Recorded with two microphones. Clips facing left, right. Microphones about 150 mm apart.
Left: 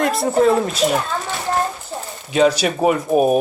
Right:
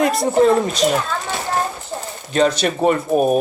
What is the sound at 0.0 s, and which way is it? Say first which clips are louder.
Speech: right 1 dB; centre (ahead or behind).